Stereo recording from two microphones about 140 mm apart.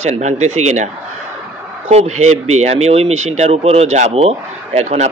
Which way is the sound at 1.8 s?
50° right (ahead or behind).